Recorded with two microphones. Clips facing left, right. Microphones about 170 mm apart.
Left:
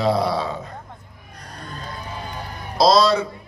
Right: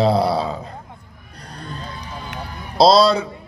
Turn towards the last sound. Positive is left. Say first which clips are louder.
# right 3 dB
turn(degrees=-30)  # may be behind; listen again after turning